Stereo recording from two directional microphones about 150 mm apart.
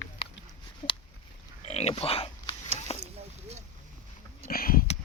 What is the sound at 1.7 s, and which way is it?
Oink, 45° left (ahead or behind).